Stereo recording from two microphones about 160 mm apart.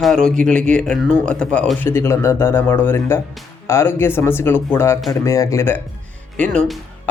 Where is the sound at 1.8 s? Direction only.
15° left (ahead or behind).